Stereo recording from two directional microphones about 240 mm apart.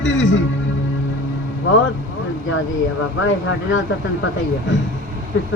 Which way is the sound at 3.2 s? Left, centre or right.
Left.